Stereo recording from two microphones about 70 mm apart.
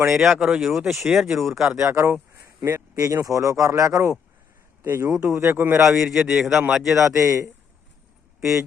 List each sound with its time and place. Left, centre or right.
0.1 s speech: centre
1.9 s speech: right
2.4 s a sound: right
3.0 s speech: right
5.1 s a man's voice: centre
5.4 s speech: right
5.7 s a man's voice: centre
7.2 s speech: right